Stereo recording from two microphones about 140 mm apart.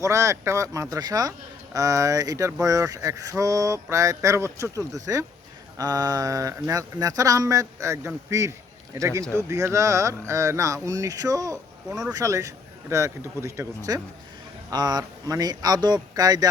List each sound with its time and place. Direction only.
0.0 s speech: 20° right (ahead or behind)